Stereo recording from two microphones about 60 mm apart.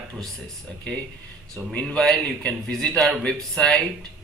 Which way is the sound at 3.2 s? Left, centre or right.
Centre.